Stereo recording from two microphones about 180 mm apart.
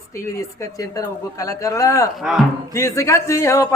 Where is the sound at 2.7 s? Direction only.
15° left (ahead or behind).